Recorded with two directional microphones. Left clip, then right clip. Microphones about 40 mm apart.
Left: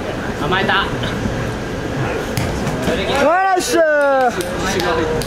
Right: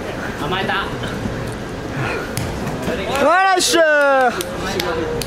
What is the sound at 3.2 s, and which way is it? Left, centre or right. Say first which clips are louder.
A man's voice: right 2 dB; right.